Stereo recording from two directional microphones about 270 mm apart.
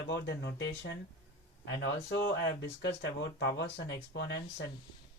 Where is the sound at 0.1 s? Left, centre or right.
Left.